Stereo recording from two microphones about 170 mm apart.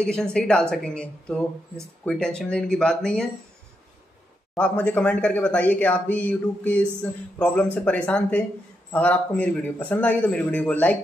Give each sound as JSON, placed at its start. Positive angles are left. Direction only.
{"t": 0.0, "sound": "a woman's voice", "side_deg": 5}
{"t": 4.6, "sound": "speech", "side_deg": 10}